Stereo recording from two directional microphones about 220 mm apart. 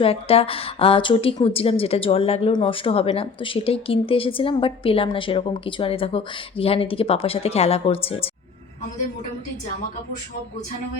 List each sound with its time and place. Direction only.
0.0 s a woman's voice: 25° left (ahead or behind)